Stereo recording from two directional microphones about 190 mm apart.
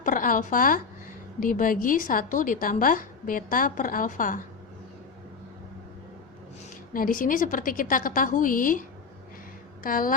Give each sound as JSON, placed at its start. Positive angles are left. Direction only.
{"t": 0.0, "sound": "a woman's voice", "side_deg": 45}
{"t": 6.9, "sound": "a woman's voice", "side_deg": 45}
{"t": 9.8, "sound": "a woman's voice", "side_deg": 45}